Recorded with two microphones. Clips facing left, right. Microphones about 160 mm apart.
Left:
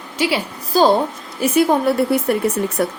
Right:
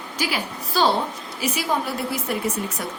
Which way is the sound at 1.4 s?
55° left (ahead or behind).